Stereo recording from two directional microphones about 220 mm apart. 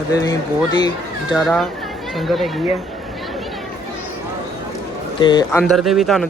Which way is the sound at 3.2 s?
Centre (ahead or behind).